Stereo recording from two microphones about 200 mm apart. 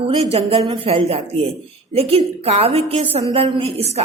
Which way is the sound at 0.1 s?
30° right (ahead or behind).